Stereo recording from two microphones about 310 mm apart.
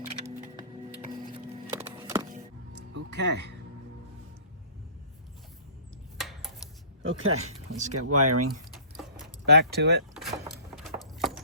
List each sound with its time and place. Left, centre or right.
1.7 s music: centre
3.1 s speech: right
6.1 s a sound: centre
7.0 s speech: right
9.5 s speech: right
10.2 s a sound: centre